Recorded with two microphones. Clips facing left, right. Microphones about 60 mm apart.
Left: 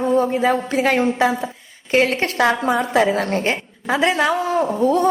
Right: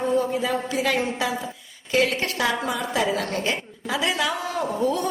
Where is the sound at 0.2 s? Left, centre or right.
Left.